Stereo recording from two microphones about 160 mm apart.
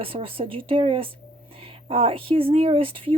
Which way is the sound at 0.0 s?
35° right (ahead or behind).